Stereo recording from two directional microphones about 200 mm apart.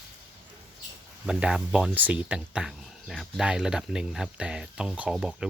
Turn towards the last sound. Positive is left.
turn(degrees=0)  # may be behind; listen again after turning